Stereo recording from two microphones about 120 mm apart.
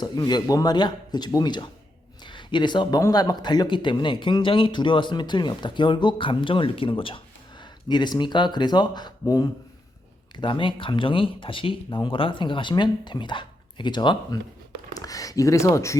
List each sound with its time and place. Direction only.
0.0 s speech: 35° left (ahead or behind)
10.3 s speech: 45° left (ahead or behind); by 16.0 s 25° left (ahead or behind)